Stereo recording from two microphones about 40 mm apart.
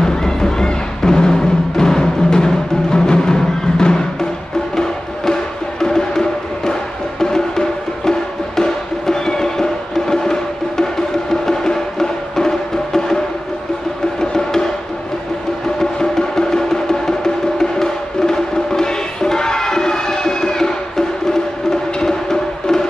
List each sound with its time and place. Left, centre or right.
0.0 s music: centre
14.3 s music: centre
15.8 s music: centre